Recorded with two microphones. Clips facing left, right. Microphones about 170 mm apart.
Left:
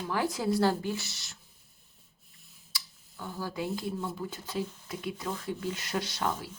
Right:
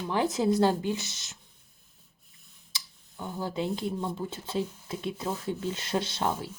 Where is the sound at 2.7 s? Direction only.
20° right (ahead or behind).